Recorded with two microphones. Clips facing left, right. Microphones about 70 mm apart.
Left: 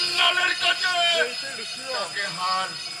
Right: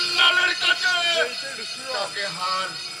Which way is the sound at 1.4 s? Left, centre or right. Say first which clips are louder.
Right 1 dB; right.